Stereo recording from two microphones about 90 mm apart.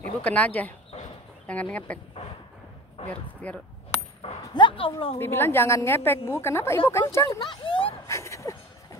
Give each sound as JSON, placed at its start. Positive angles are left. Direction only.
{"t": 0.2, "sound": "speech", "side_deg": 15}
{"t": 3.1, "sound": "speech", "side_deg": 15}
{"t": 4.2, "sound": "dog", "side_deg": 75}
{"t": 5.2, "sound": "a woman's voice", "side_deg": 25}
{"t": 7.3, "sound": "a sound", "side_deg": 60}
{"t": 8.1, "sound": "dog", "side_deg": 35}